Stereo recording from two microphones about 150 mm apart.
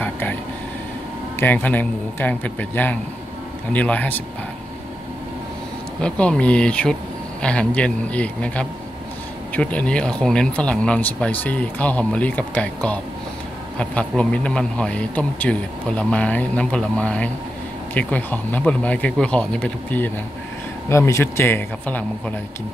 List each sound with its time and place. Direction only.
0.0 s vehicle: 10° left (ahead or behind)
1.4 s speech: 10° left (ahead or behind)
5.9 s speech: 5° left (ahead or behind)